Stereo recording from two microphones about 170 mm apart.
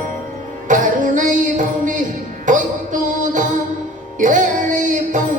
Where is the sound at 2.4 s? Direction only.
50° right (ahead or behind).